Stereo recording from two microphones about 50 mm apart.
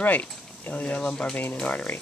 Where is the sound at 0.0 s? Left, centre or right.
Left; by 1.9 s centre.